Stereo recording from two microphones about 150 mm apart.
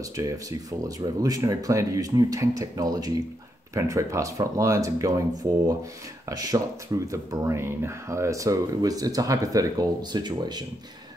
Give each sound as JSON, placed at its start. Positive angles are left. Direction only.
{"t": 0.2, "sound": "speech", "side_deg": -20}